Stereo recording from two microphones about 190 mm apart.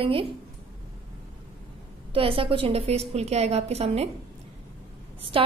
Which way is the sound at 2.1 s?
30° right (ahead or behind).